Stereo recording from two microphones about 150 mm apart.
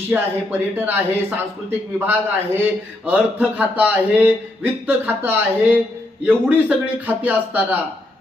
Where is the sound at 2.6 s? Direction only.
10° right (ahead or behind).